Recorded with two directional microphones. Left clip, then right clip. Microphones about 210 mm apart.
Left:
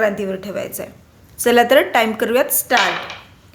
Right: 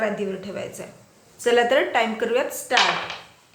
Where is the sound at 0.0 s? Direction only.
50° left (ahead or behind).